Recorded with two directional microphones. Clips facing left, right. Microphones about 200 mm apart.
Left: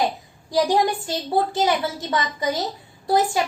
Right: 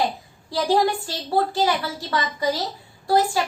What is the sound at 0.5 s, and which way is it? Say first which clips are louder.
A woman's voice: left 1 dB; 15° left (ahead or behind).